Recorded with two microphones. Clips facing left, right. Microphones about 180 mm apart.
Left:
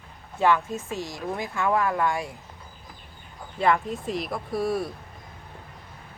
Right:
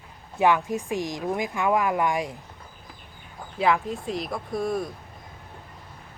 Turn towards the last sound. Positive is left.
turn(degrees=5)  # may be behind; listen again after turning